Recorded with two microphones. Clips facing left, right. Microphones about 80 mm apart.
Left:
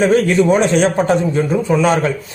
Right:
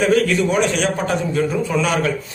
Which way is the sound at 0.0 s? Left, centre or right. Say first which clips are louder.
Left 4 dB; left.